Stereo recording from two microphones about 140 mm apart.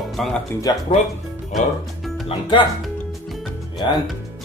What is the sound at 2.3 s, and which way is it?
Speech, 35° left (ahead or behind).